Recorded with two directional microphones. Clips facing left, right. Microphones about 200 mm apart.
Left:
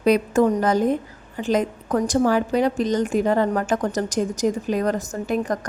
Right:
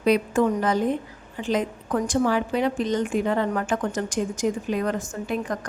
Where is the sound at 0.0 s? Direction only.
45° left (ahead or behind).